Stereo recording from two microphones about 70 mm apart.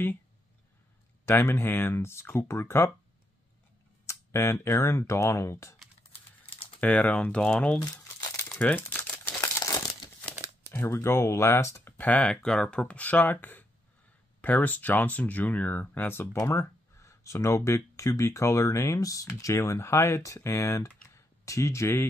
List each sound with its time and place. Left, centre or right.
1.2 s speech: left
4.0 s speech: left
6.8 s speech: left
9.4 s crumpling: left
10.7 s speech: left
12.0 s speech: centre
16.4 s speech: left
19.4 s speech: left